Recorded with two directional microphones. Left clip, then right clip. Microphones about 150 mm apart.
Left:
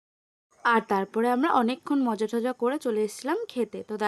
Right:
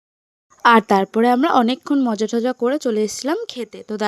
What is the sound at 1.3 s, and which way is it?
Speech, 35° right (ahead or behind).